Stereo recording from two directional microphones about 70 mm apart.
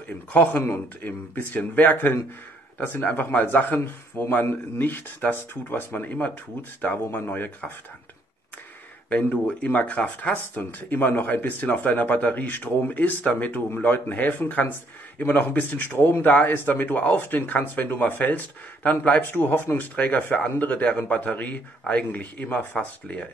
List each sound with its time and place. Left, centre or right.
0.3 s speech: left
9.1 s speech: left
20.0 s speech: left